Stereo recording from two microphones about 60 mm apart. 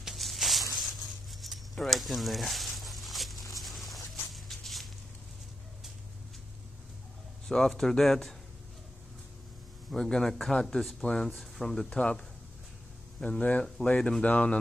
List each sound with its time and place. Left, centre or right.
0.0 s a sound: centre
7.4 s speech: centre
9.8 s speech: centre
11.9 s speech: centre
13.4 s speech: left